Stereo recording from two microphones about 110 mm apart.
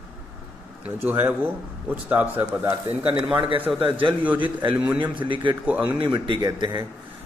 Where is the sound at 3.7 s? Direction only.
Centre (ahead or behind).